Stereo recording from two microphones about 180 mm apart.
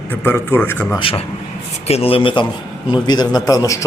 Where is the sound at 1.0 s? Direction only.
30° left (ahead or behind).